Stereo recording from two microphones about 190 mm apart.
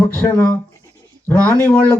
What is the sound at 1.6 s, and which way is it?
Speech, 10° left (ahead or behind).